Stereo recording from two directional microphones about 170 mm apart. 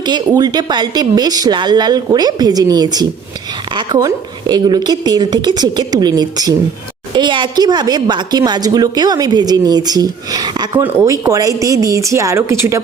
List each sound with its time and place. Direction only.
0.0 s speech: 25° right (ahead or behind)